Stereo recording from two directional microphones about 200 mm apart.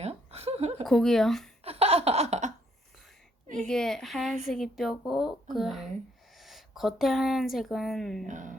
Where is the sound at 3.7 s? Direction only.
Centre (ahead or behind).